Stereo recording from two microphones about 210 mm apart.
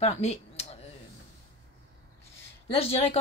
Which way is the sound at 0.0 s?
30° left (ahead or behind).